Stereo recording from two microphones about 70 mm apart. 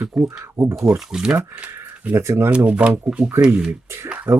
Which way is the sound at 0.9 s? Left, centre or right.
Centre.